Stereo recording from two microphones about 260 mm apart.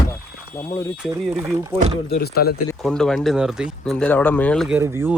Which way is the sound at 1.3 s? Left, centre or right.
Centre.